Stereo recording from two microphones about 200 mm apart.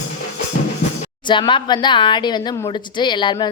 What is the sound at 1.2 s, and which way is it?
Speech, 25° left (ahead or behind).